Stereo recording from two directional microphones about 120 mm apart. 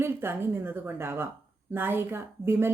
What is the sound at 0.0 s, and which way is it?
Speech, 20° right (ahead or behind).